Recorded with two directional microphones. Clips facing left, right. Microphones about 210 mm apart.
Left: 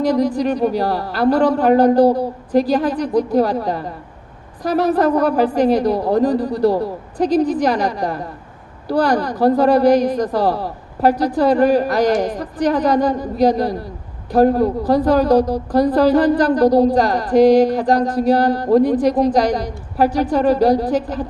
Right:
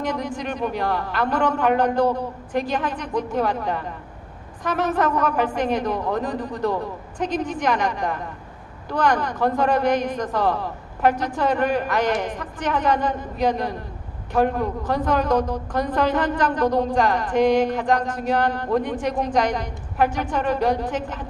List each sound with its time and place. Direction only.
0.0 s a woman's voice: 35° left (ahead or behind)